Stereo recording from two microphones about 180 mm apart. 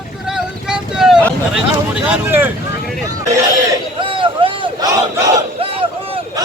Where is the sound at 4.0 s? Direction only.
30° right (ahead or behind).